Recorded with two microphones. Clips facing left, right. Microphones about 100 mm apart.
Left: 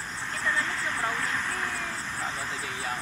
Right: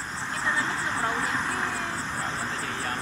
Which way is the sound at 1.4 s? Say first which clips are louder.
Right 3 dB; 10° right (ahead or behind).